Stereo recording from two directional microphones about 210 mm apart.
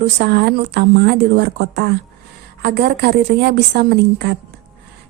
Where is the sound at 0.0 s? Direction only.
50° right (ahead or behind).